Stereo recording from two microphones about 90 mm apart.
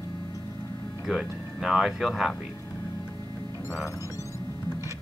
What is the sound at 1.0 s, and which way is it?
Speech, centre (ahead or behind).